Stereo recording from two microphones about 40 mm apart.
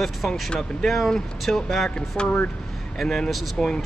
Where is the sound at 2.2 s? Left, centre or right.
Left.